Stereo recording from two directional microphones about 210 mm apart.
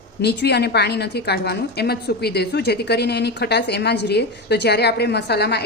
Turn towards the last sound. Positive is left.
turn(degrees=50)  # may be behind; listen again after turning